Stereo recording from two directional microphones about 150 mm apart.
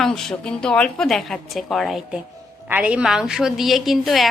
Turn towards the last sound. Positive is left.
turn(degrees=0)  # may be behind; listen again after turning